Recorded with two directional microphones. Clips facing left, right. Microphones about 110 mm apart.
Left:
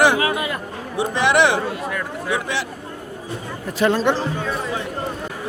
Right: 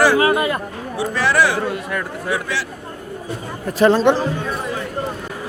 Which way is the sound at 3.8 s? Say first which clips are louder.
Right 5 dB; 30° right (ahead or behind).